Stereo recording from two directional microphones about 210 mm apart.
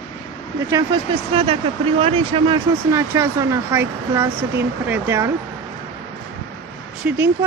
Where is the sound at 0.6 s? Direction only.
20° right (ahead or behind).